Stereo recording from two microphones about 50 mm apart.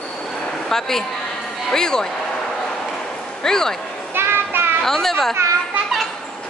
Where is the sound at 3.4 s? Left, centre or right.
Centre.